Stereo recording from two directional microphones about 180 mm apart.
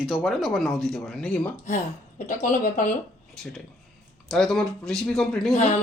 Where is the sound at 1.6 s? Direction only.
45° left (ahead or behind).